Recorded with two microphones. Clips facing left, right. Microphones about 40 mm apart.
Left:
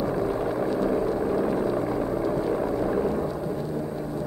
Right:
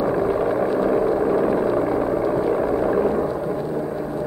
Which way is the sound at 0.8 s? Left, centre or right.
Right.